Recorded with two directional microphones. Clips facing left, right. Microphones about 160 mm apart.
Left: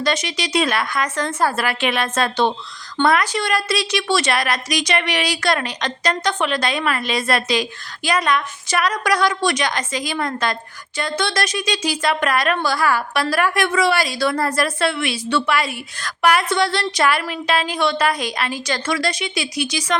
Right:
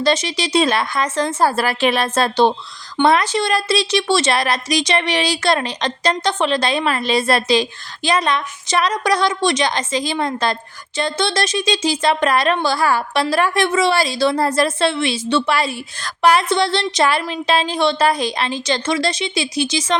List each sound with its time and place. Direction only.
0.0 s a woman's voice: 30° right (ahead or behind)